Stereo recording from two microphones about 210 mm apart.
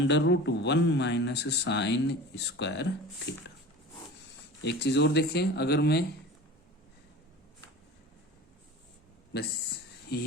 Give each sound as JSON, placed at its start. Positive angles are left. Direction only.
{"t": 0.0, "sound": "speech", "side_deg": 55}
{"t": 4.6, "sound": "speech", "side_deg": 55}
{"t": 10.1, "sound": "speech", "side_deg": 50}